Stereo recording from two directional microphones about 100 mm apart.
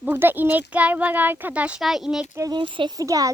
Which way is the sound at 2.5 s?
55° right (ahead or behind).